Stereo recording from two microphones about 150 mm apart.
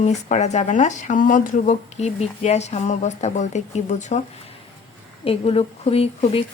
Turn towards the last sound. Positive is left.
turn(degrees=40)  # may be behind; listen again after turning